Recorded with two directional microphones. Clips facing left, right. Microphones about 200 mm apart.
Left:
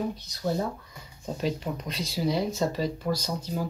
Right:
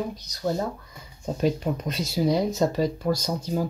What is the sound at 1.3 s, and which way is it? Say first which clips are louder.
Speech: right 6 dB; 50° right (ahead or behind).